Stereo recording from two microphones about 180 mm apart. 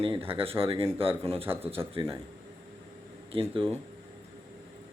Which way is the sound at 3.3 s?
30° right (ahead or behind).